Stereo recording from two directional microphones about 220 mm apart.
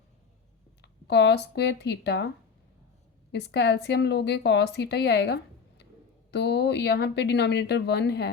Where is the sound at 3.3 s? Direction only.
50° left (ahead or behind).